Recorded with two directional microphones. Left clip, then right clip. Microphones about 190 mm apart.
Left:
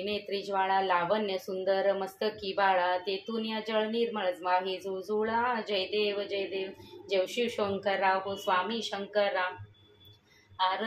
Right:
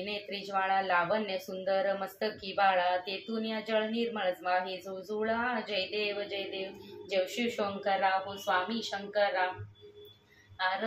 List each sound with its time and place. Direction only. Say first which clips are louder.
0.0 s speech: left 4 dB; 35° left (ahead or behind)